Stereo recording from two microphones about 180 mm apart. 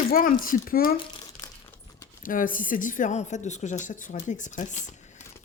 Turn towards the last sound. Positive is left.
turn(degrees=40)  # may be behind; listen again after turning